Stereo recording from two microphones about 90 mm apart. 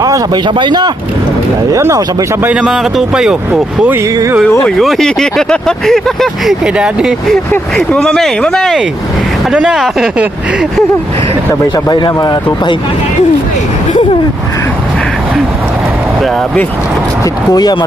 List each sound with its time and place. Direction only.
0.4 s speech: 60° right (ahead or behind)
1.7 s speech: 35° right (ahead or behind)
2.4 s speech: 15° right (ahead or behind)
2.6 s speech: 5° right (ahead or behind)
4.6 s speech: centre (ahead or behind)
7.8 s speech: 5° left (ahead or behind)
9.5 s speech: 10° right (ahead or behind)
11.9 s speech: 50° left (ahead or behind)
17.5 s speech: 50° left (ahead or behind)